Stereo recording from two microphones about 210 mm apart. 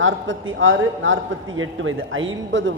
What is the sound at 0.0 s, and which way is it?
A man's voice, 65° right (ahead or behind).